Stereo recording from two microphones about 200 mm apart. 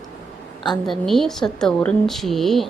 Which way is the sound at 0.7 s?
Centre (ahead or behind).